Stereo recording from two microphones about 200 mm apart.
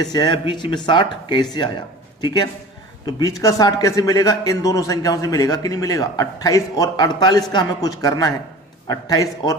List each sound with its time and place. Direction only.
0.0 s speech: 20° left (ahead or behind)
3.2 s a man's voice: 15° left (ahead or behind)